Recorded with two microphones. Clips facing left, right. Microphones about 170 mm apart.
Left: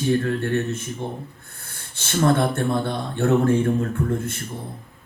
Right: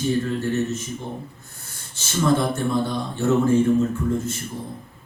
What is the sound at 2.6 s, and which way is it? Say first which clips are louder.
Speech: even; 60° left (ahead or behind).